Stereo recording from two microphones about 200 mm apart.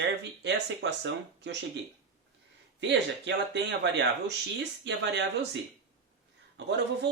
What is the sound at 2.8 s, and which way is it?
Speech, 60° right (ahead or behind).